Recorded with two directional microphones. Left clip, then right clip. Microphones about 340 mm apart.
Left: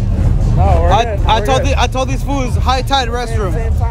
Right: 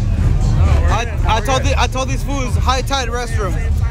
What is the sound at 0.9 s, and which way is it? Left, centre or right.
Speech, centre.